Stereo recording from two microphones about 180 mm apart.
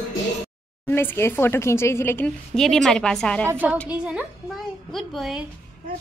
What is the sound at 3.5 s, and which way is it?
A woman's voice, 10° right (ahead or behind).